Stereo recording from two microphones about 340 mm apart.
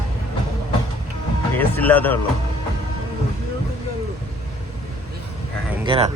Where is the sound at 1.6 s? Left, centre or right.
Centre.